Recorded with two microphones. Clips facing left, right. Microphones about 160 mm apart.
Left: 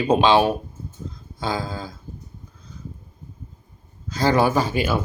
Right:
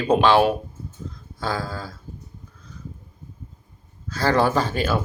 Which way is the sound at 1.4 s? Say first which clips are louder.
Left 1 dB; 15° left (ahead or behind).